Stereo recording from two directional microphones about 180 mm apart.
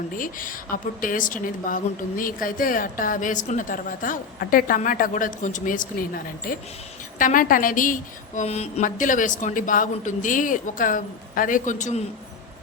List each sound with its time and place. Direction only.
0.2 s a woman's voice: 50° left (ahead or behind)
8.4 s a woman's voice: 35° left (ahead or behind)